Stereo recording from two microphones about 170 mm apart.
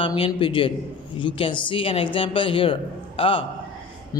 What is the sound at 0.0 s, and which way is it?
A man's voice, 30° left (ahead or behind).